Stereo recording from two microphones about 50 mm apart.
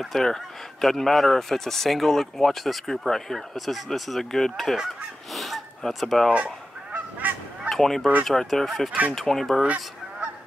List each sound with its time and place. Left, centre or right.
0.0 s a man's voice: centre
5.3 s a sound: centre
6.3 s goose: right
7.7 s a man's voice: centre